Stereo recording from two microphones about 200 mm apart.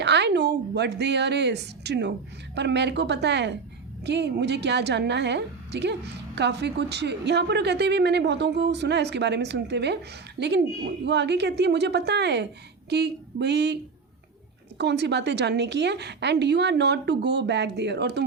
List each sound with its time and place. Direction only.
0.0 s a woman's voice: 60° right (ahead or behind)
14.8 s a woman's voice: 60° right (ahead or behind)